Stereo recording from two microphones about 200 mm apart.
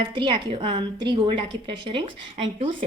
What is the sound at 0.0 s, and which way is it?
Speech, 25° right (ahead or behind).